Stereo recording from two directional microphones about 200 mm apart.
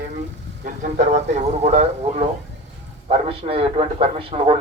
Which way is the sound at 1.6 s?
35° right (ahead or behind).